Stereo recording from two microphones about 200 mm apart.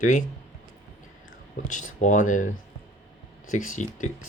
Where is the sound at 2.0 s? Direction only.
40° left (ahead or behind).